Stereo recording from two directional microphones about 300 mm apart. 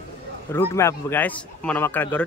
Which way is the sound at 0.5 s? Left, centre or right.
Centre.